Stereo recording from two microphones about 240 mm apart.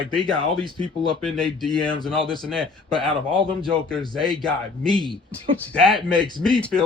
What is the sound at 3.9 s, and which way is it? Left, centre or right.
Speech, centre.